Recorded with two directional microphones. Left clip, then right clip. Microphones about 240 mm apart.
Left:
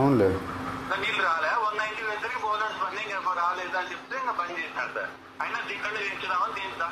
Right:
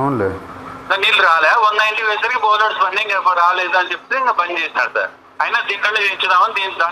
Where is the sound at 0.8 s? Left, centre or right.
Right.